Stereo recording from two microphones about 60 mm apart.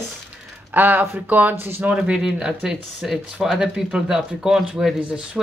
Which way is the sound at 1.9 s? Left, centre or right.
Centre.